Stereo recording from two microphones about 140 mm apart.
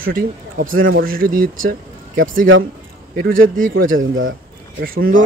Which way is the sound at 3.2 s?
75° right (ahead or behind).